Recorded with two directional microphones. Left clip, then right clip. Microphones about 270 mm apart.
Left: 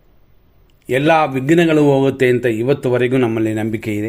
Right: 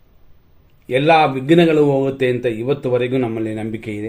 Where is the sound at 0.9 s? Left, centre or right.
Left.